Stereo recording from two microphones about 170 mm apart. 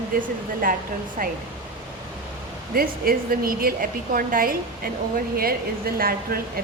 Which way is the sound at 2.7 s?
60° right (ahead or behind).